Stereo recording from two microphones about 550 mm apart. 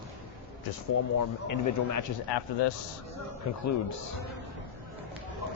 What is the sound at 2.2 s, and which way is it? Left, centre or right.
Speech, left.